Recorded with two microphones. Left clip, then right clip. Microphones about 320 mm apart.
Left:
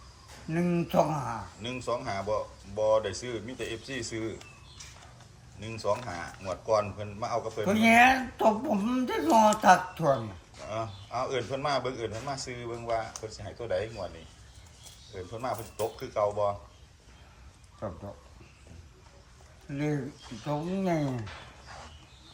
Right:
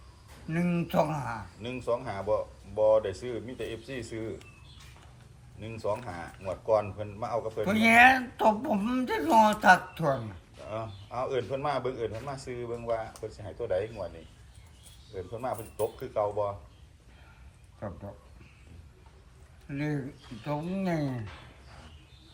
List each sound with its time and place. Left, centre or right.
0.5 s speech: centre
5.5 s speech: centre
15.1 s speech: centre
17.7 s speech: centre
19.7 s speech: centre